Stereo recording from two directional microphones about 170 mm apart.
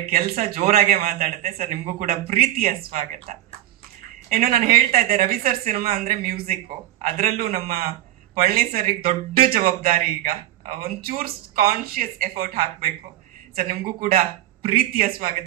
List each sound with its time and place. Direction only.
0.1 s a woman's voice: 55° right (ahead or behind)